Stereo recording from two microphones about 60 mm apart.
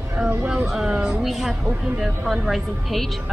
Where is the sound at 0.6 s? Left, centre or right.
Centre.